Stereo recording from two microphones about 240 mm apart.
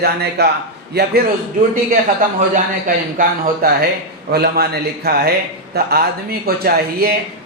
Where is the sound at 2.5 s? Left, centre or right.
Right.